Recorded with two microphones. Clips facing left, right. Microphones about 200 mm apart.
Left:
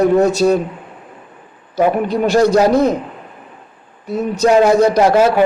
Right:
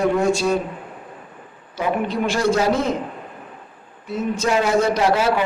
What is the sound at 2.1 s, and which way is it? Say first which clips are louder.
Speech: left 7 dB; 40° left (ahead or behind).